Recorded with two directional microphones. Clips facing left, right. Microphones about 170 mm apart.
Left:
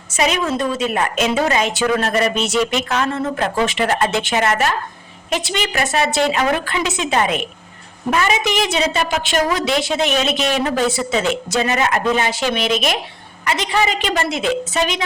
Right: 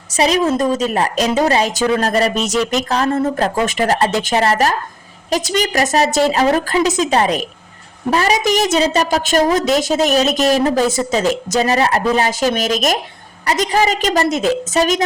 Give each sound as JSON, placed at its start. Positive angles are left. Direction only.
{"t": 0.2, "sound": "a woman's voice", "side_deg": -35}